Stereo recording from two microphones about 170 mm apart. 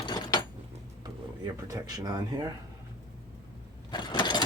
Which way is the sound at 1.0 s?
25° right (ahead or behind).